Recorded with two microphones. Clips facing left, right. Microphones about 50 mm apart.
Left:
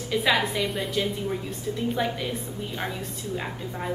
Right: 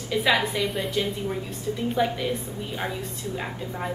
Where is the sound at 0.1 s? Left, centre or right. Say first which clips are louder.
Right 1 dB; centre.